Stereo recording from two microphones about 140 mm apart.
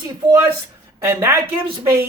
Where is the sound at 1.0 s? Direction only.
20° right (ahead or behind).